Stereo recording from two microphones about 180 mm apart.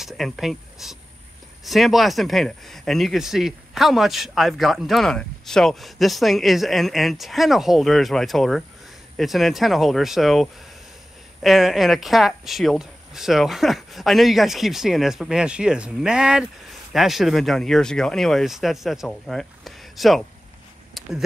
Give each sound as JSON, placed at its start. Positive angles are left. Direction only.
{"t": 0.0, "sound": "speech", "side_deg": 0}